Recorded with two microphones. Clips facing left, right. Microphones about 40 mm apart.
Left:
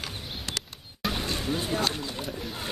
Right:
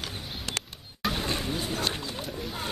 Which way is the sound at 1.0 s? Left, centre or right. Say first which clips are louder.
Right 1 dB; centre.